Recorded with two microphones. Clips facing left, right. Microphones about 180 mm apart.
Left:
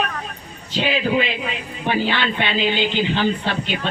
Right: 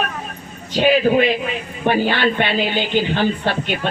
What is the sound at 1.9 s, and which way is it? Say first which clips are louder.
Speech: right 4 dB; 40° right (ahead or behind).